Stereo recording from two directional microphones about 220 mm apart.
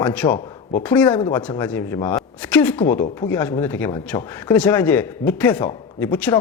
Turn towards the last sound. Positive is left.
turn(degrees=10)  # may be behind; listen again after turning